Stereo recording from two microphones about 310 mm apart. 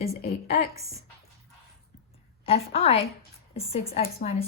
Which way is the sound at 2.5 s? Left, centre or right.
Centre.